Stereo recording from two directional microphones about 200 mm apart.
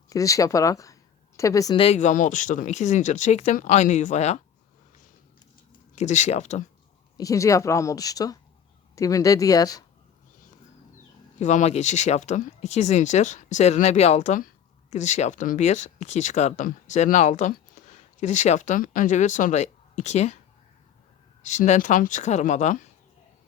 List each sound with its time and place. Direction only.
0.1 s speech: 15° left (ahead or behind); by 4.4 s 35° left (ahead or behind)
5.9 s speech: 35° left (ahead or behind)
7.2 s speech: 15° left (ahead or behind)
11.3 s speech: 35° left (ahead or behind)
21.4 s speech: 35° left (ahead or behind)